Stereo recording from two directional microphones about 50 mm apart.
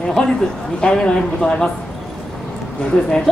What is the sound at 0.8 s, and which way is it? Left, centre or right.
Speech, centre.